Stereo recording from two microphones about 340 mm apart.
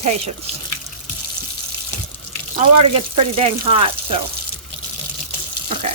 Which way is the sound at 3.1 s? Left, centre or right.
Centre.